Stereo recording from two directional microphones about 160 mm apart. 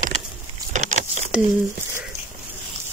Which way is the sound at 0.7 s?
50° right (ahead or behind).